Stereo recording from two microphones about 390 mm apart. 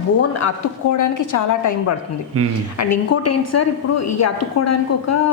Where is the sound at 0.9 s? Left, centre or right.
Left.